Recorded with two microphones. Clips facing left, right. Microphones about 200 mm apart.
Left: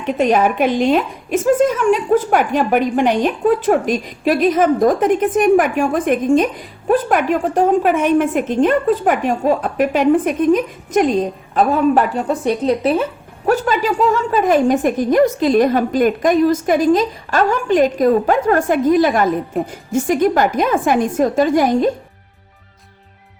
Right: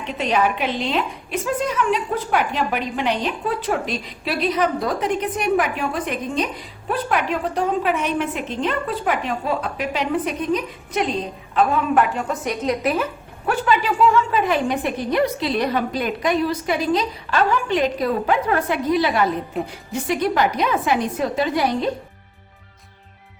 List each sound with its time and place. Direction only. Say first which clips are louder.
0.0 s a woman's voice: left 6 dB; 45° left (ahead or behind)